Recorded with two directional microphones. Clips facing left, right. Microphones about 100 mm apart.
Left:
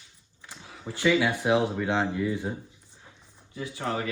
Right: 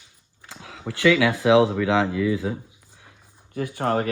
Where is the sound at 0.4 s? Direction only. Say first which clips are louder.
Right 5 dB; 90° right.